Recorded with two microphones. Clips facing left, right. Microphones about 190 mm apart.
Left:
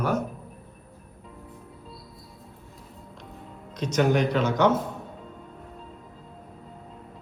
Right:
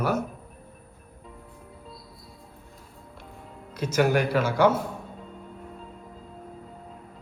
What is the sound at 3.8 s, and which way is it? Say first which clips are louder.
Speech: even; 5° right (ahead or behind).